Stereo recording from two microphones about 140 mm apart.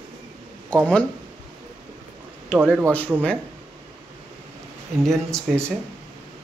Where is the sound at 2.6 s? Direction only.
15° right (ahead or behind).